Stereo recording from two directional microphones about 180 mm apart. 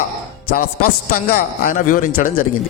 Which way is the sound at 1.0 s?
50° left (ahead or behind).